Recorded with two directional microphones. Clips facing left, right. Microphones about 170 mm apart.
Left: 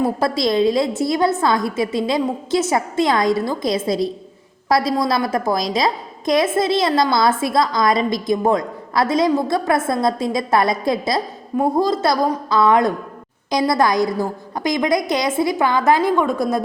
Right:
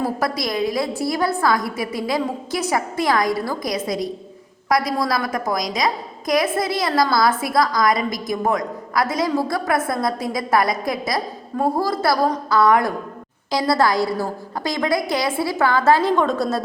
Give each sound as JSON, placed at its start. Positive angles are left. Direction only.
{"t": 0.0, "sound": "a woman's voice", "side_deg": 25}